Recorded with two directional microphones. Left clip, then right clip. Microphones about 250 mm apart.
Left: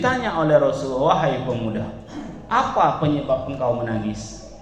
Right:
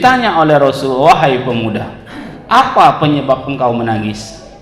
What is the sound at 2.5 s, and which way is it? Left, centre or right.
A man's voice, right.